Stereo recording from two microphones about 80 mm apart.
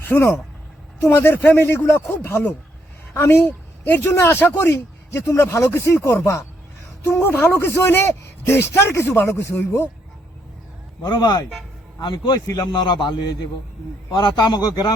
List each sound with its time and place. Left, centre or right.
0.0 s a man's voice: left
3.8 s a man's voice: left
11.0 s a man's voice: left